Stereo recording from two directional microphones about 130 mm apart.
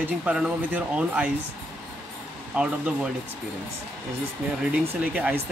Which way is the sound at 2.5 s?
10° right (ahead or behind).